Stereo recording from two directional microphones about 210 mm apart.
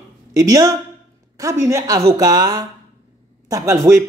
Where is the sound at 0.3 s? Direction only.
15° right (ahead or behind).